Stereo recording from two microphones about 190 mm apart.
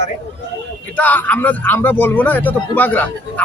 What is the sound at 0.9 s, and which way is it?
A man's voice, 10° left (ahead or behind).